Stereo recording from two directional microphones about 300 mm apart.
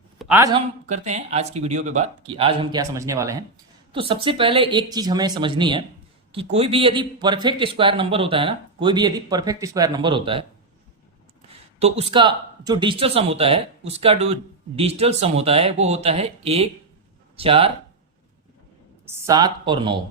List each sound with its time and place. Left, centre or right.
0.2 s a man's voice: centre
0.9 s a man's voice: right
11.8 s speech: right
19.0 s a man's voice: centre